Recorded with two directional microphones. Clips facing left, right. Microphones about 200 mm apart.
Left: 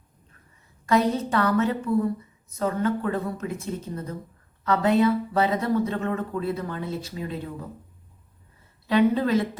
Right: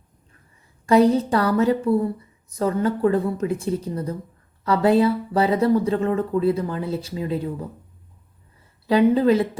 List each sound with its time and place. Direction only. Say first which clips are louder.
0.9 s speech: right 6 dB; 30° right (ahead or behind)
8.9 s speech: right 4 dB; 30° right (ahead or behind)